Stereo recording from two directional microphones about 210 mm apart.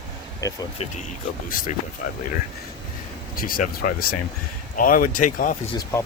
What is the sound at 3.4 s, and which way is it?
Speech, 40° left (ahead or behind).